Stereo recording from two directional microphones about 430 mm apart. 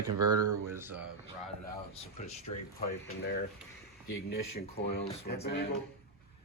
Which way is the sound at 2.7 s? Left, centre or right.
Left.